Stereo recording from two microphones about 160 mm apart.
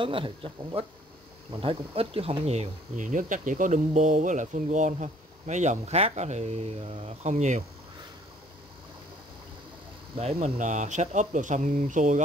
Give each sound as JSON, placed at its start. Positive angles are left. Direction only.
{"t": 0.0, "sound": "speech", "side_deg": -35}
{"t": 10.1, "sound": "speech", "side_deg": -40}